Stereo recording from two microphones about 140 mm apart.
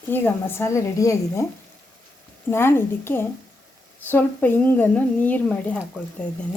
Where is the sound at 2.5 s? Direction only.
15° left (ahead or behind).